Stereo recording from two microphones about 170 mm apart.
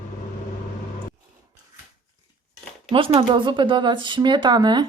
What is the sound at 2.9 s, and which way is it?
Speech, 30° right (ahead or behind).